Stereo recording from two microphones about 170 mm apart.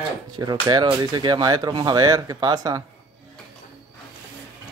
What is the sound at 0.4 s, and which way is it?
Speech, 25° right (ahead or behind).